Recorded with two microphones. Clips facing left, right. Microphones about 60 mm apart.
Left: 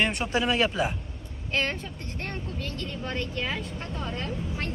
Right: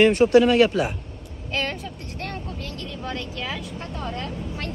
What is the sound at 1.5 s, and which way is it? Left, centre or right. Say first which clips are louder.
Vehicle: right 1 dB; left.